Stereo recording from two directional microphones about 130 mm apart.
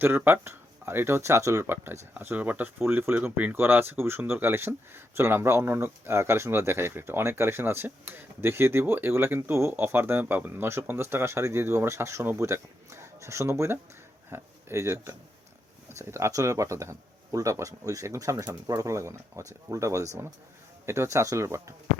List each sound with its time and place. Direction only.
0.0 s speech: 15° right (ahead or behind)